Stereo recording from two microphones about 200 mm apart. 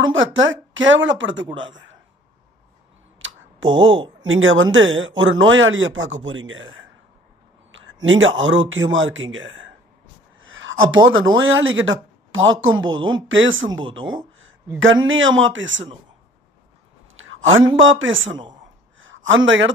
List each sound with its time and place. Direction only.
0.0 s speech: 75° right (ahead or behind)
3.2 s tick: 70° right (ahead or behind)
4.2 s speech: 75° right (ahead or behind)
10.4 s a sound: 75° right (ahead or behind)
11.1 s speech: 75° right (ahead or behind)
14.0 s speech: 25° right (ahead or behind)
15.0 s speech: 75° right (ahead or behind)
17.2 s a man's voice: 80° right
18.9 s a sound: 75° right (ahead or behind)